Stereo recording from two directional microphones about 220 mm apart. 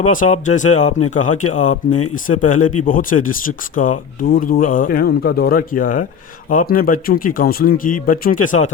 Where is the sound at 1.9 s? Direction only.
90° left.